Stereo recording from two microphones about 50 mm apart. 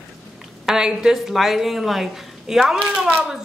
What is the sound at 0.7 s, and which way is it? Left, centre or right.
Speech, centre.